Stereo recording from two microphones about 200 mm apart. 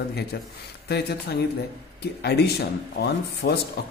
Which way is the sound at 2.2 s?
55° left (ahead or behind).